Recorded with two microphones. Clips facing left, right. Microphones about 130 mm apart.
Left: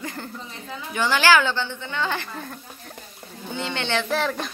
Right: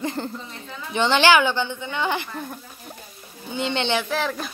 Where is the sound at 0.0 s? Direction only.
25° right (ahead or behind).